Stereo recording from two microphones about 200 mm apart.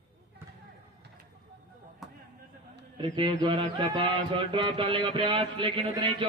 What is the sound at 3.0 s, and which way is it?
Chant, 25° right (ahead or behind).